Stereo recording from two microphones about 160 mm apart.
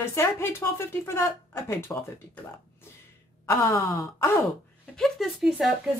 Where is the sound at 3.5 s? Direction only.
15° left (ahead or behind).